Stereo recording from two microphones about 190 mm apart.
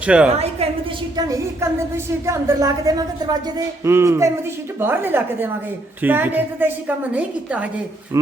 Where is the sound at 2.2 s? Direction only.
20° right (ahead or behind).